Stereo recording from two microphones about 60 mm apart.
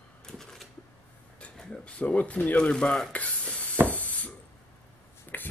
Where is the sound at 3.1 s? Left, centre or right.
Left.